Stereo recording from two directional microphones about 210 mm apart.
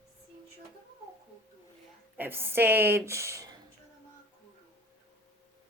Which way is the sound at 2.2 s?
10° right (ahead or behind).